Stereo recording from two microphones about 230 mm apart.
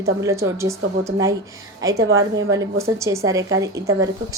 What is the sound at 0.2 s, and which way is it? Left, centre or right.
A woman's voice, centre.